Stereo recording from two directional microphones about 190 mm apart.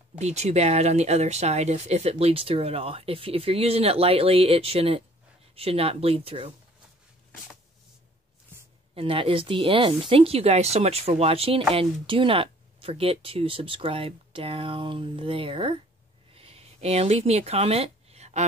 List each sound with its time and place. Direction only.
0.2 s speech: 35° right (ahead or behind)
8.9 s speech: 30° right (ahead or behind)
16.3 s a sound: 30° right (ahead or behind)